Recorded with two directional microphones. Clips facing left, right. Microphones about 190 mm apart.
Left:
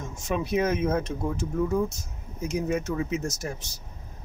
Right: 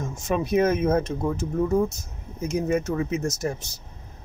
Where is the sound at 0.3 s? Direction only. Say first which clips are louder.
Right 4 dB; 45° right (ahead or behind).